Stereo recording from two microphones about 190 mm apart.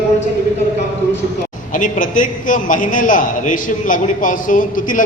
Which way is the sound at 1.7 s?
45° left (ahead or behind).